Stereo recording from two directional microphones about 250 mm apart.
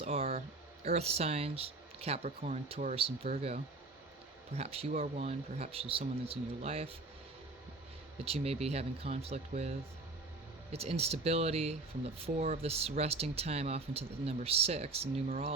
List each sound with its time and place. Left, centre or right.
0.0 s a sound: right
0.9 s speech: right
4.5 s speech: right
8.2 s speech: right